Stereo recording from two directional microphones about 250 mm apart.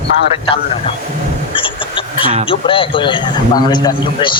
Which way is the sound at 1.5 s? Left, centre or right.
Left.